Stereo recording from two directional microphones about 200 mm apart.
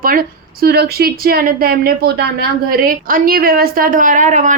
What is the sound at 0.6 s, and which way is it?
A woman's voice, 55° right (ahead or behind).